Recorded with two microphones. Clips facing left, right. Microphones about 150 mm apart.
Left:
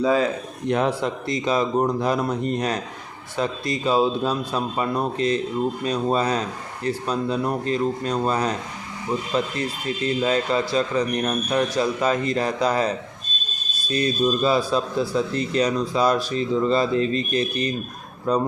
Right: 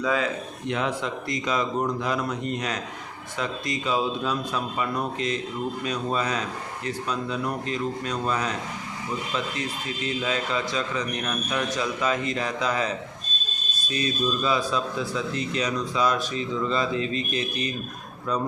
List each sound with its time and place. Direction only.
0.0 s speech: 35° left (ahead or behind)
13.9 s speech: 35° left (ahead or behind)